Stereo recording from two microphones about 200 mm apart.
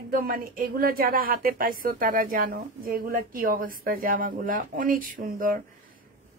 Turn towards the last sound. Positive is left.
turn(degrees=-45)  # may be behind; listen again after turning